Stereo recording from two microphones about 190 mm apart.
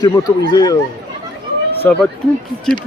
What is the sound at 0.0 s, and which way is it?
Speech, 20° left (ahead or behind).